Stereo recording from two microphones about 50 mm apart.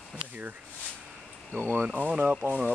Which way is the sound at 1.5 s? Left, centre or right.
Right.